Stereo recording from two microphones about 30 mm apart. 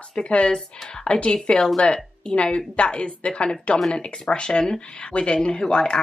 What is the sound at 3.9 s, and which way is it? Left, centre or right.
Speech, left.